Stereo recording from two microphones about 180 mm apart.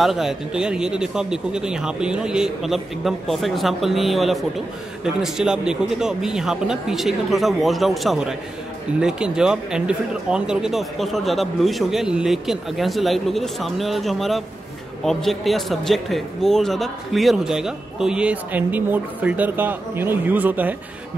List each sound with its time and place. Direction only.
0.0 s speech: centre (ahead or behind)